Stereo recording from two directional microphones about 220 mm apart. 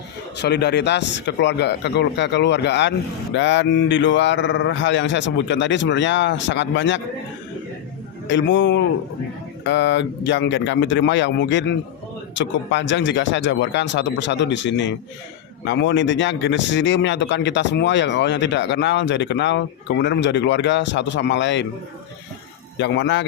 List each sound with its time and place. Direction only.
0.3 s speech: 50° left (ahead or behind)
8.3 s speech: 55° left (ahead or behind)
22.8 s speech: 55° left (ahead or behind)